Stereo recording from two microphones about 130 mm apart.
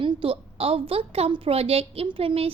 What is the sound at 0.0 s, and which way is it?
A woman's voice, 40° right (ahead or behind).